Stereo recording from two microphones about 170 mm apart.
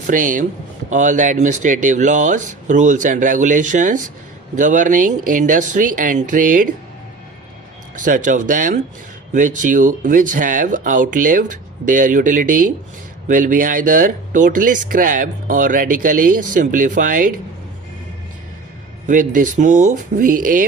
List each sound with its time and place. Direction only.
0.1 s speech: 50° right (ahead or behind)
8.0 s speech: 50° right (ahead or behind)
19.0 s speech: 50° right (ahead or behind)